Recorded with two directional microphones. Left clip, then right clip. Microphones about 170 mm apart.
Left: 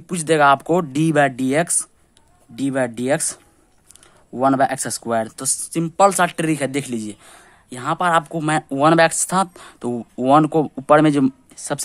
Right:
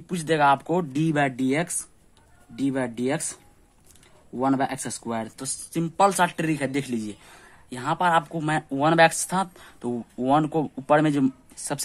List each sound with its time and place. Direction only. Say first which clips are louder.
0.0 s speech: left 6 dB; 40° left (ahead or behind)
4.4 s speech: left 8 dB; 55° left (ahead or behind); by 11.8 s 25° left (ahead or behind)